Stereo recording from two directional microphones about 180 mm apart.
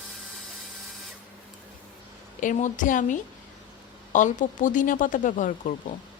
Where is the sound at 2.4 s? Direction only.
45° left (ahead or behind).